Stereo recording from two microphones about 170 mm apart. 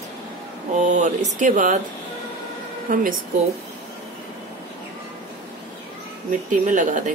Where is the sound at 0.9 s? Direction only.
45° right (ahead or behind).